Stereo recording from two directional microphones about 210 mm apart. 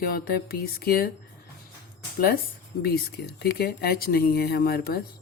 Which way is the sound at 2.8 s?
45° left (ahead or behind).